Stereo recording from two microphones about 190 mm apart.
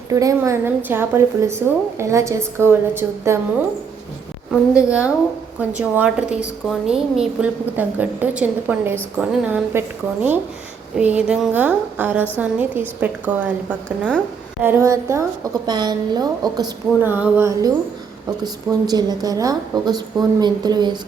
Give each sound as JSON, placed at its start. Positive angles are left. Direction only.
{"t": 0.1, "sound": "a woman's voice", "side_deg": -15}
{"t": 4.5, "sound": "a woman's voice", "side_deg": -5}
{"t": 10.9, "sound": "a woman's voice", "side_deg": -5}